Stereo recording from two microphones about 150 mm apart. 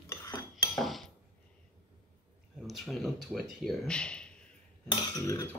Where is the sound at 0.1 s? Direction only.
20° left (ahead or behind).